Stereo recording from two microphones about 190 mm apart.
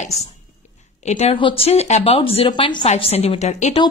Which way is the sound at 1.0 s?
35° left (ahead or behind).